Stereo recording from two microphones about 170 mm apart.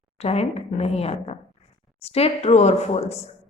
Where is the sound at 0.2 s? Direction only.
35° left (ahead or behind).